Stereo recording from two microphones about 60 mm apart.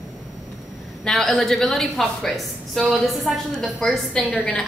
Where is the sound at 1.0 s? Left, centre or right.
Centre.